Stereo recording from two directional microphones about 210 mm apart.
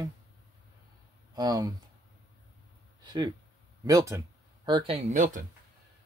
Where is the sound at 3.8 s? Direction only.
15° right (ahead or behind); by 5.4 s 35° right (ahead or behind).